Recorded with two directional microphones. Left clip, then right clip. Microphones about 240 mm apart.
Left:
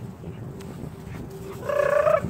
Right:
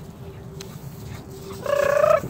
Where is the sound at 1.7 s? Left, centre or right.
Right.